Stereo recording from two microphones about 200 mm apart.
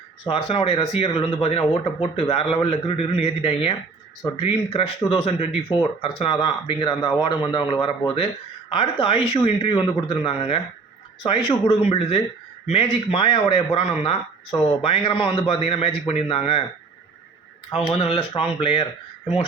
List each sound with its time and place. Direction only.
0.3 s speech: 30° left (ahead or behind)
17.7 s speech: 30° left (ahead or behind)